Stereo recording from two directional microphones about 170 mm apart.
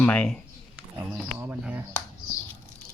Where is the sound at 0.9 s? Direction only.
10° right (ahead or behind).